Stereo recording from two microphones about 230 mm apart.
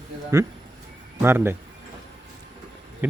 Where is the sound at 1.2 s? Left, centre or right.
Centre.